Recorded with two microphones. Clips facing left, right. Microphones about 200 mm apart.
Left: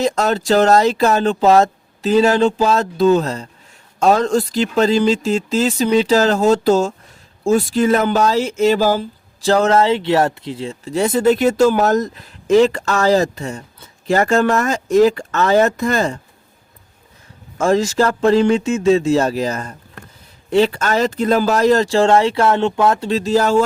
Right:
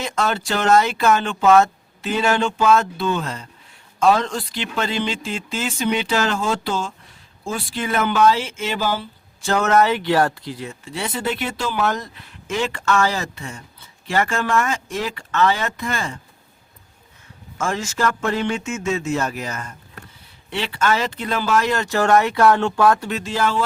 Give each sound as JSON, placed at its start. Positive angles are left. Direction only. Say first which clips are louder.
{"t": 0.0, "sound": "speech", "louder": "left 6 dB", "side_deg": 40}
{"t": 10.8, "sound": "speech", "louder": "left 11 dB", "side_deg": 40}
{"t": 17.6, "sound": "speech", "louder": "left 8 dB", "side_deg": 35}